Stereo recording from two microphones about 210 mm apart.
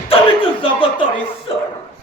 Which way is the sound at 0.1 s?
25° left (ahead or behind).